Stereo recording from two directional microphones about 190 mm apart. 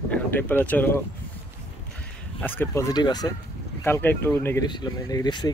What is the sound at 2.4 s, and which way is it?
Speech, 10° left (ahead or behind).